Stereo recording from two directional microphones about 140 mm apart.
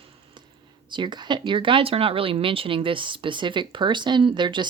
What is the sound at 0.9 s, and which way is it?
Speech, 35° right (ahead or behind).